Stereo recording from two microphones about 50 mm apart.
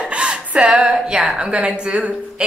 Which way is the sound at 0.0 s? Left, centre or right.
Centre.